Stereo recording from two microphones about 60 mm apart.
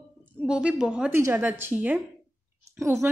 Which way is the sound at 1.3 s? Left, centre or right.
Right.